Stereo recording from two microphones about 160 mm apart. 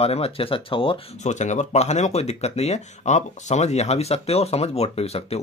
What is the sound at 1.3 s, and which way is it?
Speech, 45° left (ahead or behind).